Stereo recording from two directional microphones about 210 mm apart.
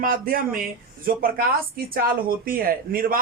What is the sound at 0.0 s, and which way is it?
Speech, 45° right (ahead or behind).